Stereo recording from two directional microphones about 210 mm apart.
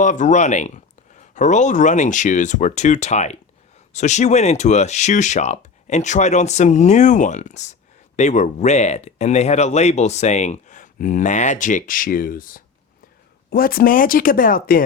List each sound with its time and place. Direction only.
0.0 s speech: 35° left (ahead or behind)